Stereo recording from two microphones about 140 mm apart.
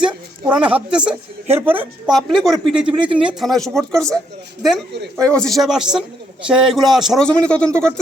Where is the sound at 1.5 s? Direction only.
15° right (ahead or behind).